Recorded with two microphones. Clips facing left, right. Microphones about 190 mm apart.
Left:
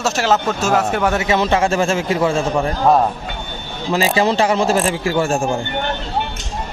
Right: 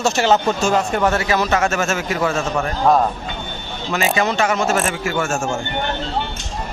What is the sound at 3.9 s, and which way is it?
Speech, 30° left (ahead or behind).